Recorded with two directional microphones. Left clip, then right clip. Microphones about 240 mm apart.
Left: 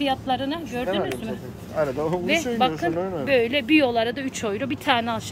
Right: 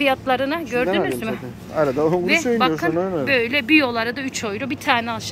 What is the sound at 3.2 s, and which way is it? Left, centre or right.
Speech, centre.